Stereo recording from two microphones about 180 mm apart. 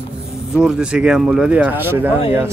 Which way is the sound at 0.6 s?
5° right (ahead or behind).